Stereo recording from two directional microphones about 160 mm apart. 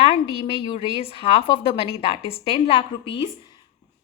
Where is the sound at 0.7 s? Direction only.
35° left (ahead or behind).